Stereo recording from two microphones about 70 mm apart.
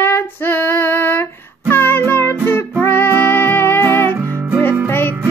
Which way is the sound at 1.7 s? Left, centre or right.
Left.